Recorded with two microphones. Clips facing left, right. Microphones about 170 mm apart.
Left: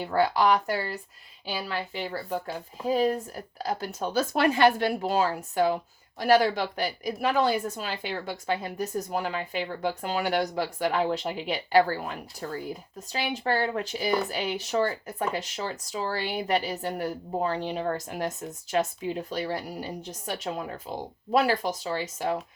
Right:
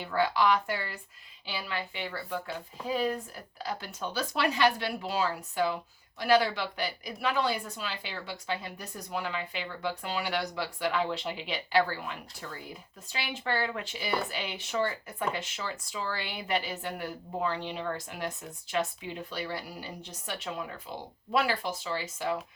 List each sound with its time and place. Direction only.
0.0 s speech: 40° left (ahead or behind)